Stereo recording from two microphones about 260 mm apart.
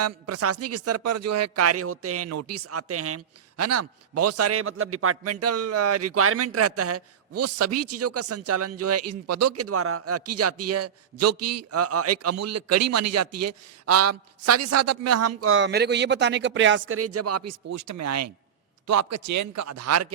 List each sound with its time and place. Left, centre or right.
0.0 s speech: right
18.9 s a man's voice: right